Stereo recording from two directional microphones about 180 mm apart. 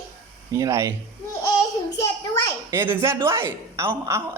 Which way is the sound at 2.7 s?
15° right (ahead or behind).